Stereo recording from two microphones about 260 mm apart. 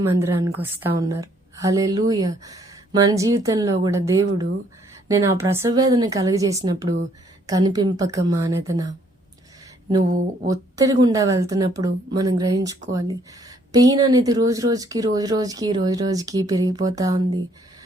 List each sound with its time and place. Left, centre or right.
0.0 s a woman's voice: centre
10.0 s speech: right
10.5 s a woman's voice: centre
13.7 s a woman's voice: centre